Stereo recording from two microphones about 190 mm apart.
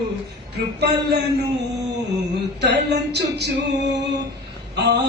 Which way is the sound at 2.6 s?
60° right (ahead or behind).